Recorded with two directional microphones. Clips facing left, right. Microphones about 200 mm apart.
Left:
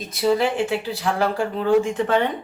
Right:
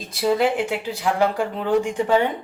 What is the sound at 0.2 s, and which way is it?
Speech, 15° right (ahead or behind).